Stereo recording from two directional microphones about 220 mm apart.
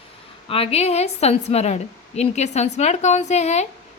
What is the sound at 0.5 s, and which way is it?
A woman's voice, 25° left (ahead or behind).